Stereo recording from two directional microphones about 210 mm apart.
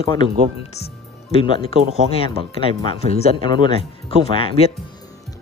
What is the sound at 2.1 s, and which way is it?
Speech, 25° left (ahead or behind).